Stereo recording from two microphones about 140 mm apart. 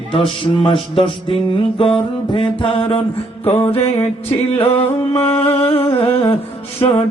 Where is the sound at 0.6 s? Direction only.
40° left (ahead or behind).